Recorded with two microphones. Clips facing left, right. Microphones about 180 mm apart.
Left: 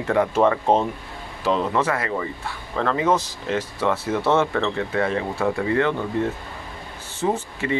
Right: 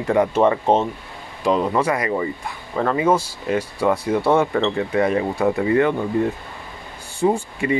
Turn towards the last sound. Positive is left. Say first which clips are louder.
# right 3 dB
turn(degrees=-10)  # may be behind; listen again after turning